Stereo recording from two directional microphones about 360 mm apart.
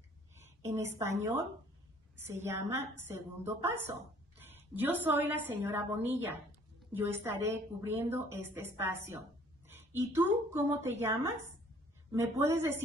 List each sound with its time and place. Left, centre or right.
0.7 s a woman's voice: centre
2.2 s a woman's voice: centre